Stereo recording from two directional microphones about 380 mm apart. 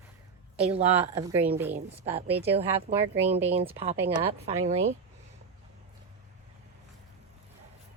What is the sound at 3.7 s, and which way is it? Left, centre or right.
A woman's voice, centre.